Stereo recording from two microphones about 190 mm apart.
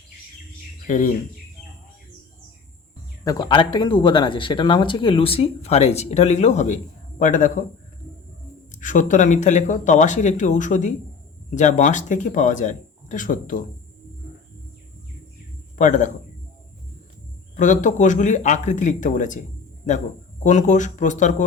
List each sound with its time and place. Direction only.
0.9 s speech: 40° left (ahead or behind)
3.2 s speech: 20° left (ahead or behind); by 7.6 s 45° left (ahead or behind)
8.7 s speech: 40° left (ahead or behind)
15.8 s speech: 40° left (ahead or behind)
17.6 s speech: 40° left (ahead or behind)